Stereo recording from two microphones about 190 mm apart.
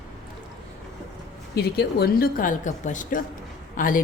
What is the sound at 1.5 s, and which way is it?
A woman's voice, 55° left (ahead or behind).